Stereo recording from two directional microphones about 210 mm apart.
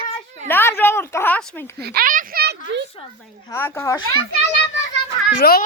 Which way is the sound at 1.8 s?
45° right (ahead or behind).